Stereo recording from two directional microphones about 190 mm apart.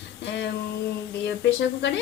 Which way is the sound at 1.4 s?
65° left (ahead or behind).